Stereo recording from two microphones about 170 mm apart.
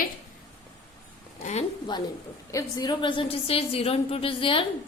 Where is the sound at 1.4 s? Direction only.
45° left (ahead or behind).